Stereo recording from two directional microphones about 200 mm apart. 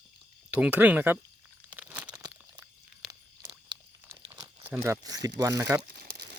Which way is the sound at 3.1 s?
20° right (ahead or behind).